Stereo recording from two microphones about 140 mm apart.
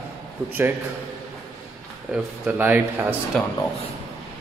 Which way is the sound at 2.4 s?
10° right (ahead or behind).